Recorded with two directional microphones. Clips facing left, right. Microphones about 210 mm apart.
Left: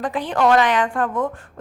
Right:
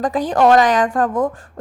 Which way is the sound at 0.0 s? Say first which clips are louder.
Right 4 dB; 40° right (ahead or behind).